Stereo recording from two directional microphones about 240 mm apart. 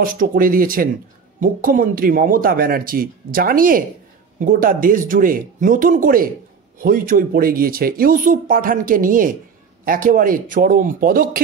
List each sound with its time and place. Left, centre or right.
0.0 s speech: right